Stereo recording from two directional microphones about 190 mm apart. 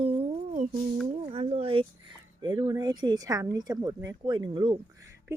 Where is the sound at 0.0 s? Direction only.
30° right (ahead or behind).